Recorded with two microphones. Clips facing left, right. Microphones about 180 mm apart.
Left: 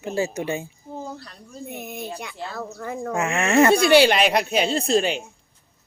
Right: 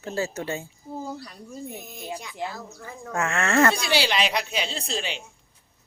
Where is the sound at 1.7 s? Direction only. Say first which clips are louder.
Left 3 dB; 60° left (ahead or behind).